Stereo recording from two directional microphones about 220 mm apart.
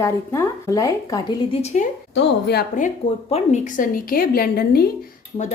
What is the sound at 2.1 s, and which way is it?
A woman's voice, 45° left (ahead or behind).